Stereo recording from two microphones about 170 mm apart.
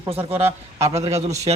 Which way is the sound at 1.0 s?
40° right (ahead or behind).